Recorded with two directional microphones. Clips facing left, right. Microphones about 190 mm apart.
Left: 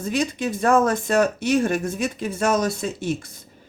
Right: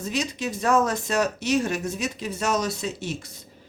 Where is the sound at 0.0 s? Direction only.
55° left (ahead or behind).